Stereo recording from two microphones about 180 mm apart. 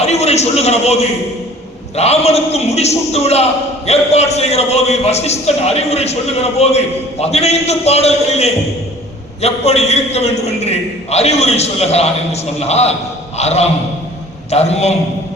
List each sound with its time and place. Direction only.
0.0 s a man's voice: 35° left (ahead or behind)